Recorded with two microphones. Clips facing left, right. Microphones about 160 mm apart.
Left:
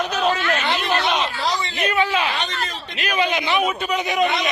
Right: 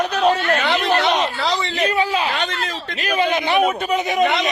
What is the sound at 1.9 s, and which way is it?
Speech, 35° right (ahead or behind).